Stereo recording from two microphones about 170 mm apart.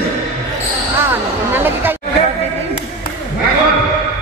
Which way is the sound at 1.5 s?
10° right (ahead or behind).